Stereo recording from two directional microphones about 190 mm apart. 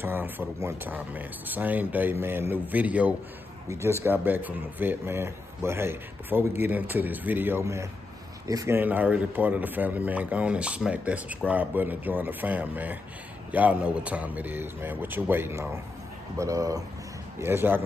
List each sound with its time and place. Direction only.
0.0 s a man's voice: 10° right (ahead or behind)